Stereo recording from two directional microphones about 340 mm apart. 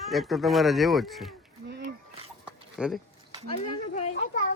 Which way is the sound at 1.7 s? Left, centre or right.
Right.